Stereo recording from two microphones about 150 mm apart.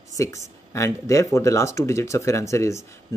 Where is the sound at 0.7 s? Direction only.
20° left (ahead or behind).